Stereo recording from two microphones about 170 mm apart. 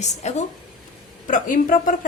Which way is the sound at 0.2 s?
40° left (ahead or behind).